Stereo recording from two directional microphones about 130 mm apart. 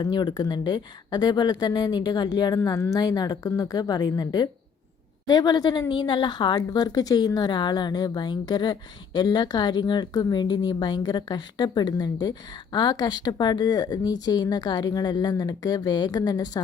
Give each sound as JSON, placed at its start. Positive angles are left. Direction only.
{"t": 0.0, "sound": "a woman's voice", "side_deg": 35}
{"t": 2.6, "sound": "a woman's voice", "side_deg": 25}